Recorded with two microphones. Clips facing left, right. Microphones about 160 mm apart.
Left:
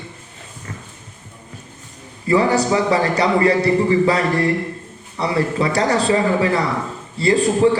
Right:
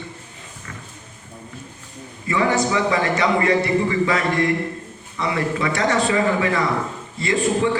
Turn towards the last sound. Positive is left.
turn(degrees=35)  # may be behind; listen again after turning